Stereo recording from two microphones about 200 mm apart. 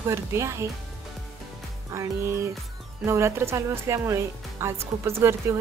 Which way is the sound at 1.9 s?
15° right (ahead or behind).